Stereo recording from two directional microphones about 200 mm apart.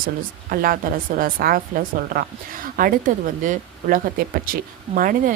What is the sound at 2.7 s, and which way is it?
A woman's voice, 45° right (ahead or behind).